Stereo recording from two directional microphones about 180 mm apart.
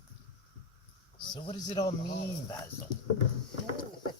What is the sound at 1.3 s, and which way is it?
Speech, 30° left (ahead or behind).